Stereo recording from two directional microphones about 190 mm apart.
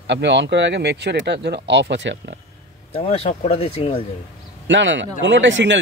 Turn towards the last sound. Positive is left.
turn(degrees=-70)  # may be behind; listen again after turning